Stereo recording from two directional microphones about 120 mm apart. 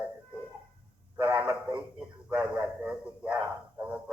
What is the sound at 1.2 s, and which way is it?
Radio, 10° right (ahead or behind).